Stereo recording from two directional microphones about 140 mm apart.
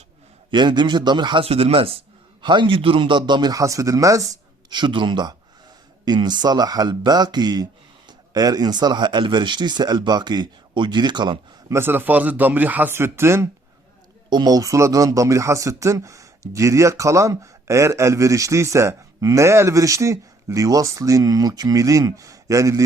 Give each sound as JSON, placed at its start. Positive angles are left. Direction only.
{"t": 0.5, "sound": "speech", "side_deg": -30}
{"t": 4.7, "sound": "speech", "side_deg": -35}
{"t": 11.7, "sound": "speech", "side_deg": -15}
{"t": 14.3, "sound": "speech", "side_deg": -30}